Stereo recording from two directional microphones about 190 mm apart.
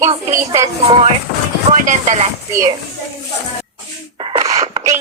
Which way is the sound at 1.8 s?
40° right (ahead or behind).